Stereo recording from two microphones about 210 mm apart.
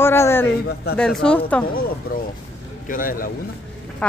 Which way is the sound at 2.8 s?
40° left (ahead or behind).